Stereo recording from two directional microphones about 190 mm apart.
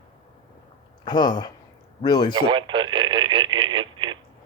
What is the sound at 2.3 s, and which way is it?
Speech, 25° right (ahead or behind).